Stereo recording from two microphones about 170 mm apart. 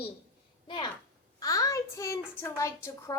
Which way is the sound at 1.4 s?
20° left (ahead or behind).